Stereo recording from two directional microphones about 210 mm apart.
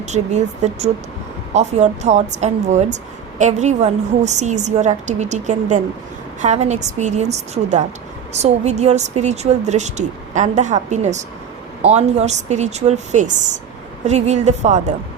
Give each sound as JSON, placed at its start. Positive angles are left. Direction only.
{"t": 0.0, "sound": "a woman's voice", "side_deg": -35}